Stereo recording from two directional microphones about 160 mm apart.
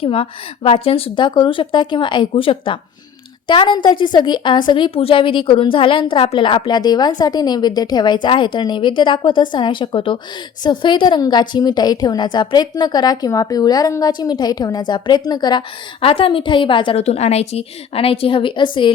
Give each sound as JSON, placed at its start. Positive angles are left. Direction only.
{"t": 0.0, "sound": "a woman's voice", "side_deg": 35}